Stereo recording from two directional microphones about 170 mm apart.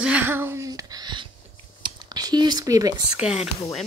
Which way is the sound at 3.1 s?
5° right (ahead or behind).